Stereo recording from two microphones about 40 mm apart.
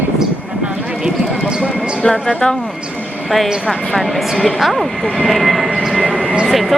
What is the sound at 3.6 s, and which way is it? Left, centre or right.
Speech, centre.